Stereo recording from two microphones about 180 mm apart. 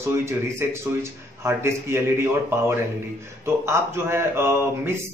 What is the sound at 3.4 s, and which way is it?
Speech, 15° right (ahead or behind).